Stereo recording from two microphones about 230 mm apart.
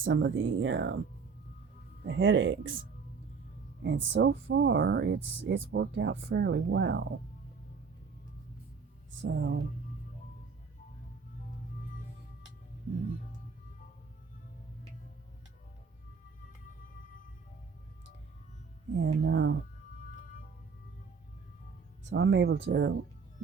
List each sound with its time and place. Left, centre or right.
0.0 s speech: right
2.0 s speech: right
3.8 s speech: right
9.2 s speech: right
18.9 s speech: right
22.1 s speech: right